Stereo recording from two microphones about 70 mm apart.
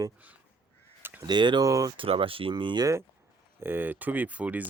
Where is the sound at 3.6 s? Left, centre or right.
Right.